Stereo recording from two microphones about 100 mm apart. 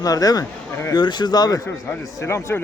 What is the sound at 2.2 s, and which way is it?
Speech, 25° left (ahead or behind).